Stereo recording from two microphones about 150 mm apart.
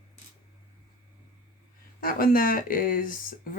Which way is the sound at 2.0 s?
70° left (ahead or behind).